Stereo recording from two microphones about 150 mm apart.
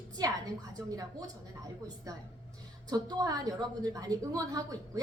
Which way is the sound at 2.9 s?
25° right (ahead or behind).